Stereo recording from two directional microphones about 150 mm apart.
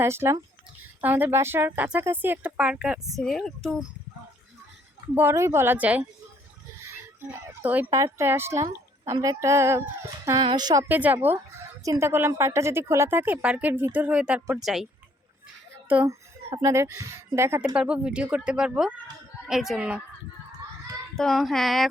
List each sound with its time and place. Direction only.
0.0 s speech: 15° right (ahead or behind); by 3.8 s centre (ahead or behind)
5.1 s speech: 15° right (ahead or behind)
10.8 s speech: 10° right (ahead or behind)
16.6 s speech: 20° right (ahead or behind)
21.2 s speech: centre (ahead or behind)